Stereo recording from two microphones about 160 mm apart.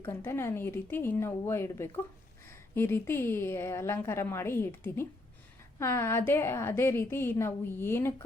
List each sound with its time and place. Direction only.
0.0 s a woman's voice: 15° left (ahead or behind)